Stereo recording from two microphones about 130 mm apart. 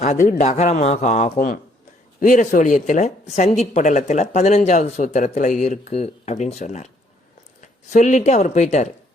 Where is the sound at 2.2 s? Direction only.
90° left.